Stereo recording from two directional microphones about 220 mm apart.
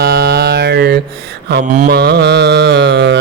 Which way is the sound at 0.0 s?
45° right (ahead or behind).